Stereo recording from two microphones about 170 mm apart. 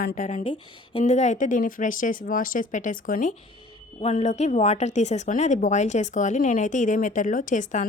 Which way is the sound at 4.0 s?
40° left (ahead or behind).